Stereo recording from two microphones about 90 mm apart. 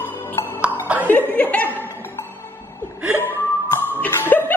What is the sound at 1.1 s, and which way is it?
Chuckle, 15° left (ahead or behind).